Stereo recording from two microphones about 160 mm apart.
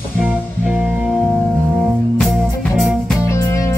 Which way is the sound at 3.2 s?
20° left (ahead or behind).